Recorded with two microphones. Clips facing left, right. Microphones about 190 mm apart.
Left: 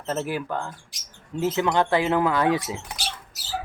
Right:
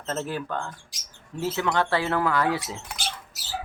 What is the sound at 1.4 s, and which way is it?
Speech, 20° left (ahead or behind).